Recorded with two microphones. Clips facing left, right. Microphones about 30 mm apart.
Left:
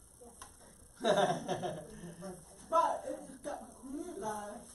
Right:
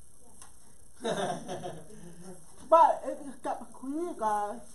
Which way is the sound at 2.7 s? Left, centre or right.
Right.